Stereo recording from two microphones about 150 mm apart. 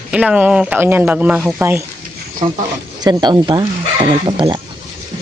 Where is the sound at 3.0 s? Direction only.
30° right (ahead or behind).